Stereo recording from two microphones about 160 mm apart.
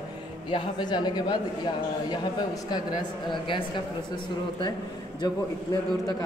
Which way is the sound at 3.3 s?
30° left (ahead or behind).